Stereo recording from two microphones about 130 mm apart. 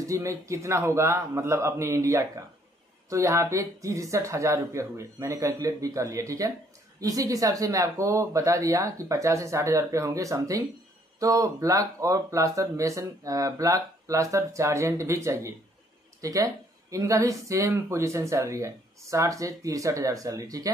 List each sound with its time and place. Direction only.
0.0 s speech: 25° right (ahead or behind)